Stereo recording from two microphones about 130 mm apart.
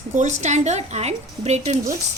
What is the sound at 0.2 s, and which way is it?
Speech, 65° right (ahead or behind).